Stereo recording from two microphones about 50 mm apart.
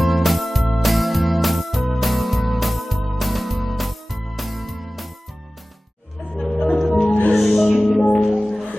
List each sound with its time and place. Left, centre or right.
0.0 s music: centre
6.7 s music: centre
7.1 s music: left
7.3 s music: centre
7.6 s music: centre